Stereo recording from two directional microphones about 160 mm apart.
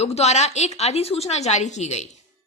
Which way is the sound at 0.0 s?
40° left (ahead or behind).